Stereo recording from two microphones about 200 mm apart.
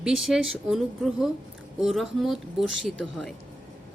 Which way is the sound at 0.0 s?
Centre (ahead or behind).